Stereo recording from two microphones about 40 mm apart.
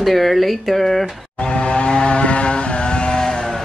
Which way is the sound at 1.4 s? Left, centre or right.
Left.